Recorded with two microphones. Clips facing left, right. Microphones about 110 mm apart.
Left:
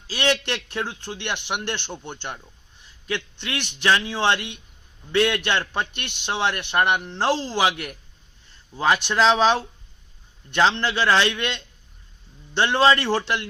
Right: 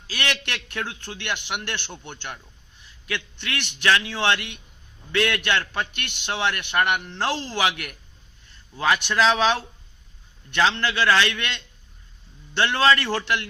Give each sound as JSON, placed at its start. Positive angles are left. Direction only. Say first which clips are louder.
{"t": 0.1, "sound": "a man's voice", "louder": "left 6 dB", "side_deg": 15}